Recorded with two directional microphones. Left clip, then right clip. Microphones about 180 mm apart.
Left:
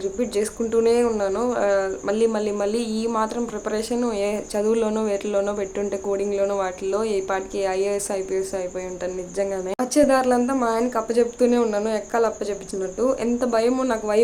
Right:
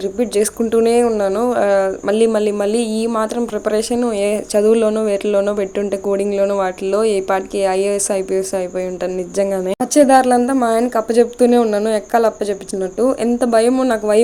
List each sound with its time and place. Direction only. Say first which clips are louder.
0.0 s speech: right 7 dB; 35° right (ahead or behind)